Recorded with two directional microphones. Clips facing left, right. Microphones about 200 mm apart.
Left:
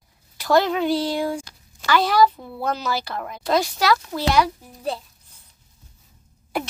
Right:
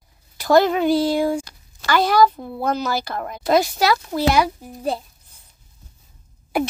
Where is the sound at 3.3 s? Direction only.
5° right (ahead or behind).